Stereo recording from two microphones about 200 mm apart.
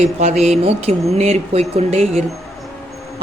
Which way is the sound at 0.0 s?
35° right (ahead or behind).